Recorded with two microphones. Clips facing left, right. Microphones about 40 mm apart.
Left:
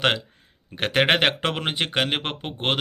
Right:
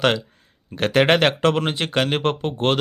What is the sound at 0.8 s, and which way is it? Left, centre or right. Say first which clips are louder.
Speech: right 3 dB; left.